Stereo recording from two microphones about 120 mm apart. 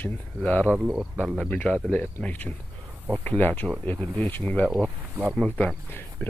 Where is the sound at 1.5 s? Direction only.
10° left (ahead or behind).